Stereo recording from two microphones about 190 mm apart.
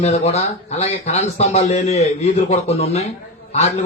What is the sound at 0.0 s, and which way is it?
Speech, 35° left (ahead or behind).